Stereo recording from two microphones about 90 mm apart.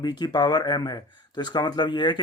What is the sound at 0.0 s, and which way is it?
Speech, 55° left (ahead or behind).